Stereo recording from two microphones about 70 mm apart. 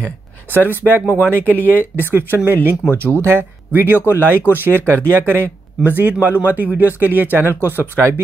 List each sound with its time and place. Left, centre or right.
0.5 s speech: right
1.3 s speech: left
2.0 s speech: right
3.7 s speech: right